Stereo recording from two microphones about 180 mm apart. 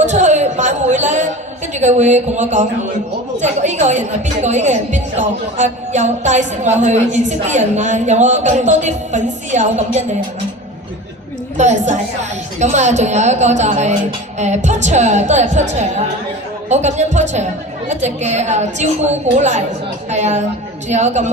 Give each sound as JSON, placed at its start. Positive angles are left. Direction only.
{"t": 0.0, "sound": "a sound", "side_deg": -40}
{"t": 1.7, "sound": "speech", "side_deg": -40}
{"t": 11.5, "sound": "speech", "side_deg": -40}